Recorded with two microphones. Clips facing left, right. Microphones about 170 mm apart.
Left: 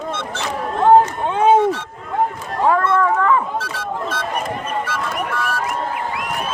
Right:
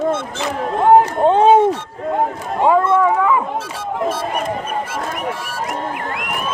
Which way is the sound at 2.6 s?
15° right (ahead or behind).